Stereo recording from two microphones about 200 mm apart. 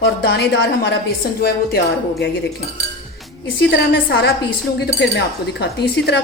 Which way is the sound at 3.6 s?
60° left (ahead or behind).